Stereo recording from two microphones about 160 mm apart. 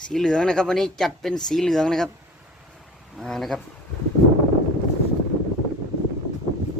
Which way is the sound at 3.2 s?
Centre (ahead or behind).